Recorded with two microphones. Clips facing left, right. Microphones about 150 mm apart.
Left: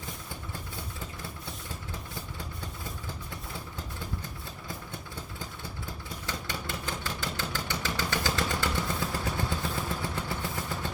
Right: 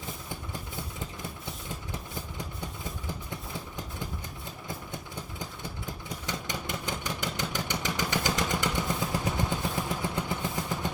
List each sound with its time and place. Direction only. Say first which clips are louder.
6.2 s vehicle: right 1 dB; 20° right (ahead or behind)